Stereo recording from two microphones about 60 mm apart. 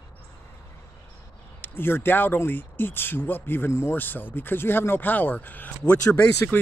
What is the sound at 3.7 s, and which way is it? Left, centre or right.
Speech, left.